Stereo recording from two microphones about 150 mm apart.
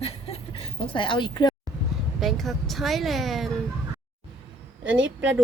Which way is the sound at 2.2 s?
Centre (ahead or behind).